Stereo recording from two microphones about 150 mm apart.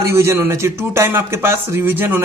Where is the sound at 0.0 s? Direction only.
20° right (ahead or behind).